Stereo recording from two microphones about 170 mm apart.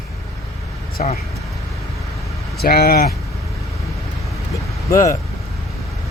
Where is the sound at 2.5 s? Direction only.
65° left (ahead or behind).